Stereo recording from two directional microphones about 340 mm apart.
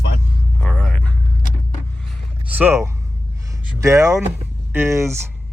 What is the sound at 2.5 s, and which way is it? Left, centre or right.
Speech, centre.